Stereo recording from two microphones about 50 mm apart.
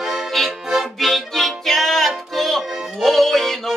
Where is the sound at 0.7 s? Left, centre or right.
Centre.